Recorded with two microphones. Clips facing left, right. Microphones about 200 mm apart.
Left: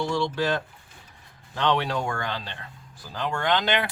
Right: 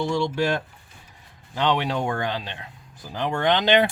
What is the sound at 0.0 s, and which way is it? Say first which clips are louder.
Speech: right 2 dB; 20° right (ahead or behind).